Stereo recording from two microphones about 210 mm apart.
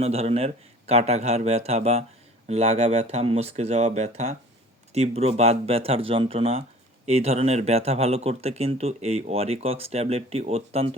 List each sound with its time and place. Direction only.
0.0 s speech: 30° right (ahead or behind)